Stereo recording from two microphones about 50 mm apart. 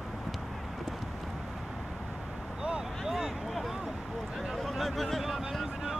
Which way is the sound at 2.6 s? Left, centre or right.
Centre.